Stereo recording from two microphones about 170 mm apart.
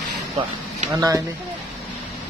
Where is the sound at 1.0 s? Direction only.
20° right (ahead or behind).